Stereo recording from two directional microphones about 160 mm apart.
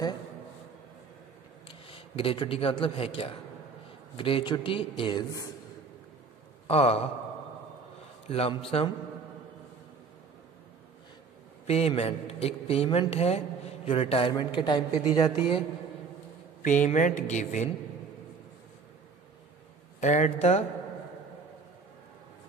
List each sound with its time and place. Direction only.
1.7 s a man's voice: 35° left (ahead or behind)
6.7 s a man's voice: 40° left (ahead or behind)
8.3 s a man's voice: 40° left (ahead or behind)
11.6 s a man's voice: 40° left (ahead or behind)
16.6 s speech: 50° left (ahead or behind)
20.0 s speech: 45° left (ahead or behind)